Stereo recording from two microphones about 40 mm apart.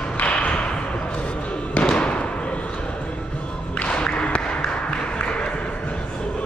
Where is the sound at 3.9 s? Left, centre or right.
Left.